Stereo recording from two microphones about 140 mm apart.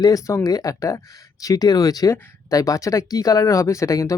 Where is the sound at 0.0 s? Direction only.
25° left (ahead or behind).